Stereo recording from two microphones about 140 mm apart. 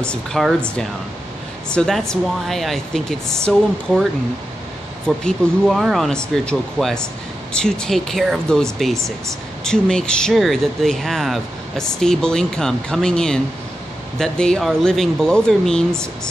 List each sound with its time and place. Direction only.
0.0 s speech: 5° left (ahead or behind)
9.7 s speech: 5° left (ahead or behind)